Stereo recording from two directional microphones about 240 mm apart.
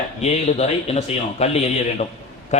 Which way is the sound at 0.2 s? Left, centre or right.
Left.